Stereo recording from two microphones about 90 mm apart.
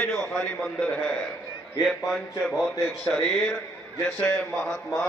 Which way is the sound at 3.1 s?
45° left (ahead or behind).